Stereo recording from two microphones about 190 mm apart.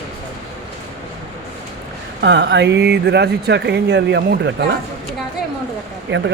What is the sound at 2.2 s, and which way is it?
Speech, 65° right (ahead or behind).